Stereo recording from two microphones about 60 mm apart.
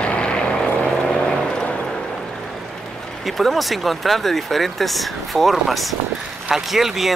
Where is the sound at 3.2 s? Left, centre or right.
Centre.